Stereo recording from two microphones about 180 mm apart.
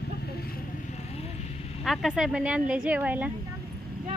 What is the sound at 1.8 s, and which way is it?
Speech, centre (ahead or behind).